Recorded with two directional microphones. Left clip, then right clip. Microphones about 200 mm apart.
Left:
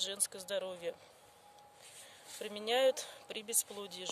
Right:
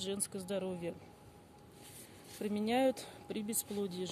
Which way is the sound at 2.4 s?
20° left (ahead or behind).